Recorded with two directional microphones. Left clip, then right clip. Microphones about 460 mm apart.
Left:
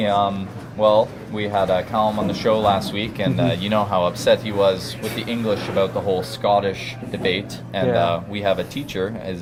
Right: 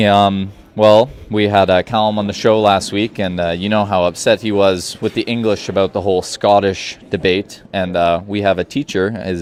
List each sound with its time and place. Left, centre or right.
0.0 s speech: right